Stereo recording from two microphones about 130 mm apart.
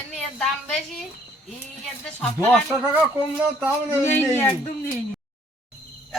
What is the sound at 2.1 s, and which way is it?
Speech, 10° left (ahead or behind).